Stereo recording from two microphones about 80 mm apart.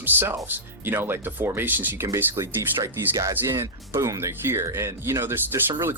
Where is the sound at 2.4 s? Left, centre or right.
Right.